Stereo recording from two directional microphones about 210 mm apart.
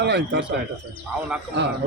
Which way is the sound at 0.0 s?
55° right (ahead or behind).